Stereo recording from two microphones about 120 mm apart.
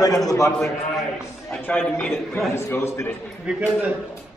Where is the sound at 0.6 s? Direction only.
Centre (ahead or behind).